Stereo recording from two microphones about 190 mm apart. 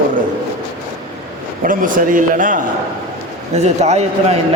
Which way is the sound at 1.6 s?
45° right (ahead or behind).